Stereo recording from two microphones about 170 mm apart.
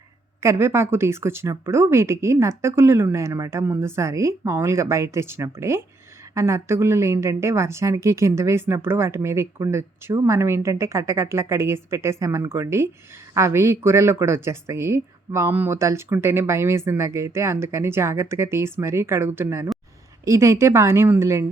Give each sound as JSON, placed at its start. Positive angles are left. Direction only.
{"t": 0.4, "sound": "a woman's voice", "side_deg": -15}